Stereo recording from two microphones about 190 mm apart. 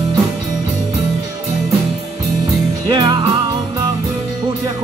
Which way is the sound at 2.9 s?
25° right (ahead or behind).